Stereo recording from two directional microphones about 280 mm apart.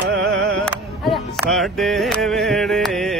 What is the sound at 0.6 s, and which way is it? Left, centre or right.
Music, centre.